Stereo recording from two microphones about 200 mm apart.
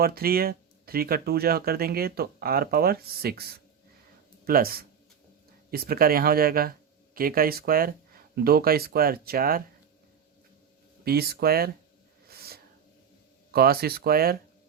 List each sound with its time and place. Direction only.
0.0 s speech: 50° right (ahead or behind)
11.0 s speech: 50° right (ahead or behind)
12.3 s wheeze: 50° right (ahead or behind)
13.5 s speech: 50° right (ahead or behind)